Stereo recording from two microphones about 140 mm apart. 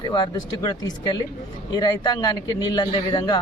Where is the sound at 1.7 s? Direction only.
30° left (ahead or behind).